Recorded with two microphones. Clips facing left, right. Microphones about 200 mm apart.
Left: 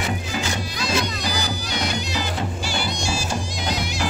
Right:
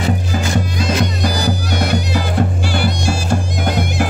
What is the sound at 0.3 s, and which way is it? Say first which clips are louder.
Music: right 7 dB; 50° right (ahead or behind).